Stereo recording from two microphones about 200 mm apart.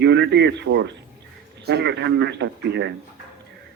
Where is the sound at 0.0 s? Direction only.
60° right (ahead or behind).